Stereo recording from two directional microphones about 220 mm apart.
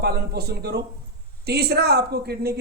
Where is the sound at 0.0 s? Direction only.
45° right (ahead or behind).